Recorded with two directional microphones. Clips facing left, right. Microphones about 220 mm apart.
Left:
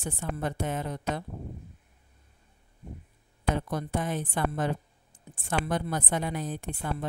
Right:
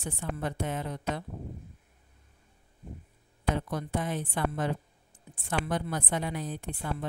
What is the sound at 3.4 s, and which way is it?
A woman's voice, 45° left (ahead or behind).